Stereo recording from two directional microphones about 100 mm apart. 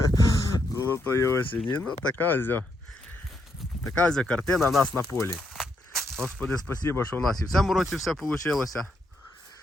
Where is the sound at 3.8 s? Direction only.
10° left (ahead or behind).